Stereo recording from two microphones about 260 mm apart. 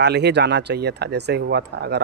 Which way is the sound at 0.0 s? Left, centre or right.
Right.